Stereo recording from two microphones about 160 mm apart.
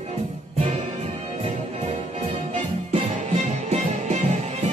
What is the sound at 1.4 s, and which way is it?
Music, 40° right (ahead or behind).